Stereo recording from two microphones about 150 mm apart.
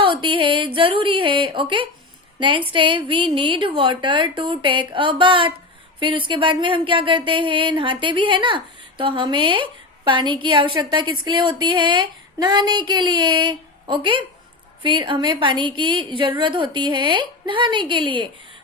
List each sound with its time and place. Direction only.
0.0 s speech: 35° right (ahead or behind)